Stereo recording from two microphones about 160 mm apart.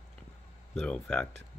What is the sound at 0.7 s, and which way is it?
Speech, 5° left (ahead or behind).